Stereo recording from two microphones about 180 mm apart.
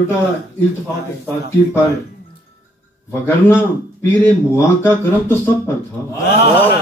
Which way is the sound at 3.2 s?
10° left (ahead or behind).